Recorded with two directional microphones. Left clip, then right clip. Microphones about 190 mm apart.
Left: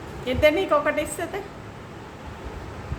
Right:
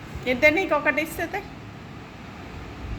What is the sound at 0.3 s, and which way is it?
A woman's voice, 5° left (ahead or behind).